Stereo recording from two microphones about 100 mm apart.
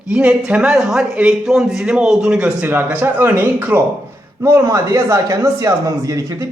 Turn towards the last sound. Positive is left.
turn(degrees=-35)  # may be behind; listen again after turning